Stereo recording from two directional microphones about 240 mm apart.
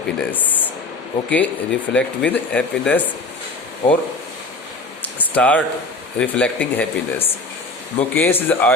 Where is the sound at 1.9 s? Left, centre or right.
Centre.